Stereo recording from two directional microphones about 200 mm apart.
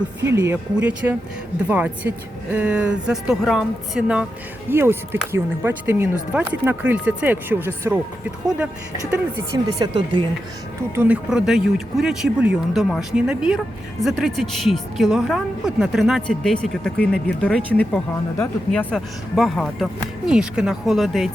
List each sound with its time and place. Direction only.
0.3 s a woman's voice: 15° right (ahead or behind)
9.6 s speech: 20° right (ahead or behind)
10.9 s a woman's voice: 10° right (ahead or behind)